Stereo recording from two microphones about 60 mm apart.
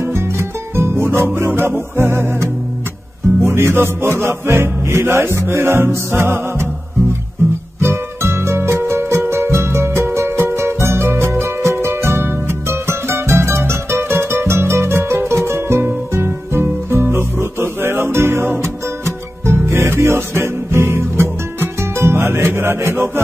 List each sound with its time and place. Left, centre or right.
0.0 s music: right